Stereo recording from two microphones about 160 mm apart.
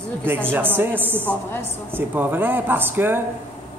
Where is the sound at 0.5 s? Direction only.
10° right (ahead or behind).